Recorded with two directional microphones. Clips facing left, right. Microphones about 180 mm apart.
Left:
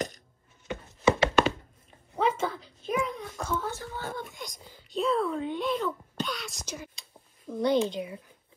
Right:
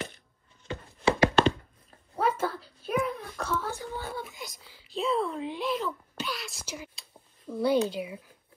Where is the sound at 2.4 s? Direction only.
10° right (ahead or behind).